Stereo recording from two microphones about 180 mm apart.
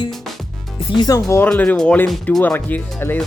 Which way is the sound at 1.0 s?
20° left (ahead or behind).